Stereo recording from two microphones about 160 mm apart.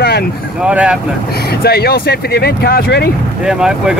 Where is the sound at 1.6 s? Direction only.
80° left.